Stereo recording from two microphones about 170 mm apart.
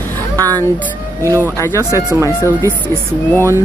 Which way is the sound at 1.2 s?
20° right (ahead or behind).